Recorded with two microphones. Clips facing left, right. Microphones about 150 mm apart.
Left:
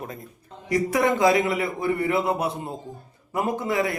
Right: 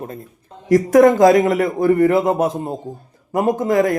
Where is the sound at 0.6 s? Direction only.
45° right (ahead or behind).